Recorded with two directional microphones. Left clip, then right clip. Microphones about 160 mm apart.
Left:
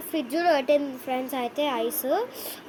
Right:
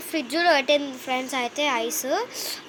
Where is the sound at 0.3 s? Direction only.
15° left (ahead or behind).